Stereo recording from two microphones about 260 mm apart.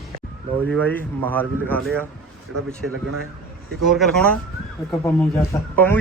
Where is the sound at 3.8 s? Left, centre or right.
Centre.